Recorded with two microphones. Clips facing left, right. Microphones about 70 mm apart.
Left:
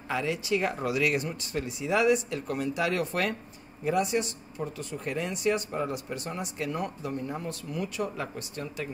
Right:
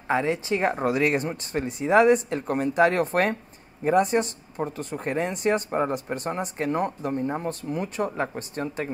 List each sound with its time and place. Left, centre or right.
0.1 s speech: right